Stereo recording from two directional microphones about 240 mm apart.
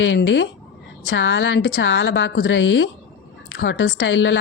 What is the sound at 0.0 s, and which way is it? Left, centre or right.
Speech, left.